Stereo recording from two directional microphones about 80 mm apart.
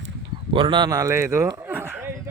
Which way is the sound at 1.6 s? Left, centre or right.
Right.